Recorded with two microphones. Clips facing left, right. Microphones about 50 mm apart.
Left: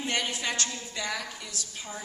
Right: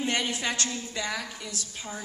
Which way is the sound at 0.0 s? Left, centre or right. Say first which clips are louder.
Right 2 dB; right.